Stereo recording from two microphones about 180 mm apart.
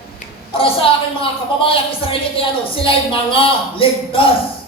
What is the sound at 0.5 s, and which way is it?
Speech, 30° left (ahead or behind).